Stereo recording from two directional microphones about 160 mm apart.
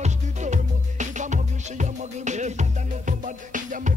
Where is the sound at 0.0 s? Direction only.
50° right (ahead or behind).